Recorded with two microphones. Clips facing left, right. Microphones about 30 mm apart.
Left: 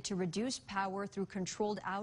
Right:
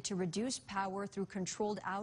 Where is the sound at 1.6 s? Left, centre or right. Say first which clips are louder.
Left 1 dB; left.